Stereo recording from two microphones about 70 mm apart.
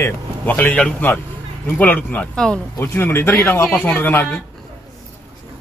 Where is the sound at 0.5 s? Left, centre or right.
Left.